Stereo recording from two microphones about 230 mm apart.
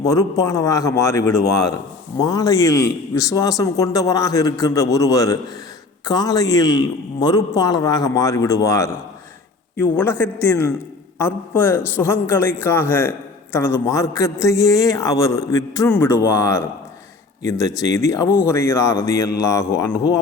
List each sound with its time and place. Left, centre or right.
0.0 s a man's voice: centre
10.0 s a man's voice: centre